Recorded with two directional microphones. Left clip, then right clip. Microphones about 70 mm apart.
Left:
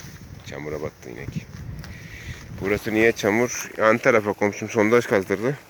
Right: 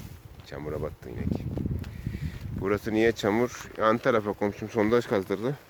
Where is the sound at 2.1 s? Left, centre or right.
Right.